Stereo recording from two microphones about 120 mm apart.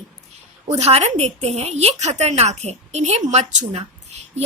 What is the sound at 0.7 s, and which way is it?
A woman's voice, 60° right (ahead or behind).